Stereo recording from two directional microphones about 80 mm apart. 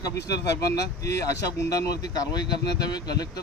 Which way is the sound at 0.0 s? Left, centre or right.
Left.